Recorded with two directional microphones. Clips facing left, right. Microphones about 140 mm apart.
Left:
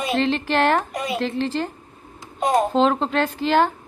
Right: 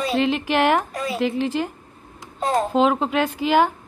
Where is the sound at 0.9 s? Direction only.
20° left (ahead or behind).